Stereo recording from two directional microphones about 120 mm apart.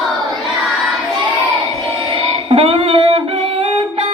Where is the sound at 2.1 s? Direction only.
50° right (ahead or behind).